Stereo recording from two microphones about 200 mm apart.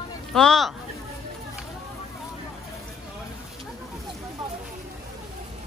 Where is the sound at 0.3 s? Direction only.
Centre (ahead or behind).